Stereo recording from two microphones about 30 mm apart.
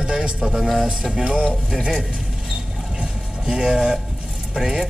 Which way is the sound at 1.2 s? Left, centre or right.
Right.